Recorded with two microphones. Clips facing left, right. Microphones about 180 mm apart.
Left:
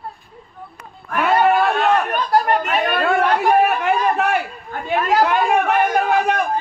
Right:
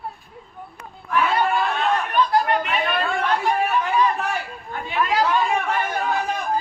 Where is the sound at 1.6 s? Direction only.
60° left (ahead or behind).